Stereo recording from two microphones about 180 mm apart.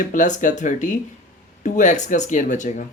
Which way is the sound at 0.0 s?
45° left (ahead or behind).